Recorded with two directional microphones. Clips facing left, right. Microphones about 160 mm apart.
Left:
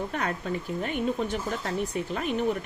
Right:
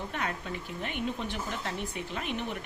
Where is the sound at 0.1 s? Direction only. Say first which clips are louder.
Left 4 dB; 40° left (ahead or behind).